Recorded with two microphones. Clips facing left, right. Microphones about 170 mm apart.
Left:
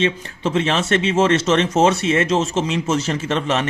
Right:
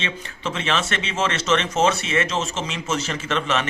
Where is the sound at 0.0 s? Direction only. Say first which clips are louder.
Left 9 dB; 50° left (ahead or behind).